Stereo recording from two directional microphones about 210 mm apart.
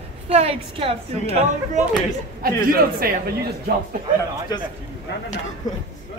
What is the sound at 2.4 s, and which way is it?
Speech, 45° right (ahead or behind).